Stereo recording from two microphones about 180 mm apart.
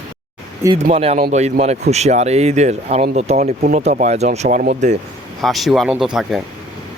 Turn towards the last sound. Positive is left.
turn(degrees=0)  # may be behind; listen again after turning